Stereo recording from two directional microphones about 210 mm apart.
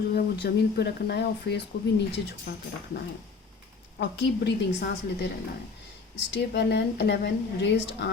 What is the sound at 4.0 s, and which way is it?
Speech, 55° left (ahead or behind).